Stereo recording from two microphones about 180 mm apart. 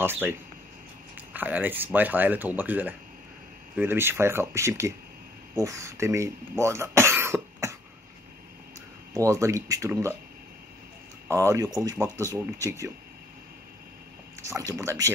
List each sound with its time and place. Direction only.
0.0 s speech: 10° right (ahead or behind)
9.1 s speech: 15° right (ahead or behind)
11.2 s speech: 15° right (ahead or behind)
14.4 s speech: 15° right (ahead or behind)